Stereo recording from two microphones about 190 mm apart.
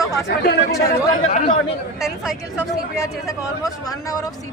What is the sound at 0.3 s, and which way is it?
Speech, 55° left (ahead or behind).